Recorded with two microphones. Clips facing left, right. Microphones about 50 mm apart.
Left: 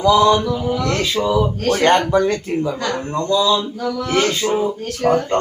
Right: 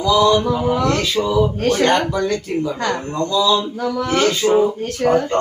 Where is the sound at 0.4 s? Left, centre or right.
Right.